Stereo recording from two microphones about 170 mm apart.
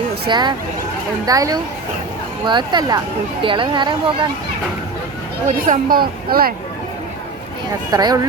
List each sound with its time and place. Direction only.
0.3 s speech: 25° right (ahead or behind)
5.5 s speech: 45° right (ahead or behind)
7.9 s speech: 20° right (ahead or behind)